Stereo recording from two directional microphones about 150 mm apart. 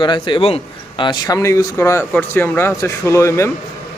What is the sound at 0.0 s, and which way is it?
A man's voice, 30° left (ahead or behind).